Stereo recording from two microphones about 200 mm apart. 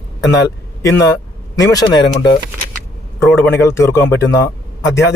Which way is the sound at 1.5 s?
20° left (ahead or behind).